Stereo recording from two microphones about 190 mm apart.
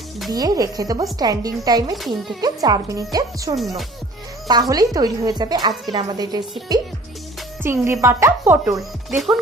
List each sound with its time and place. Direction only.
0.3 s speech: 20° right (ahead or behind)
2.0 s a child's voice: centre (ahead or behind)
2.4 s speech: 20° right (ahead or behind)
4.7 s speech: 20° right (ahead or behind)
9.0 s a child's voice: centre (ahead or behind)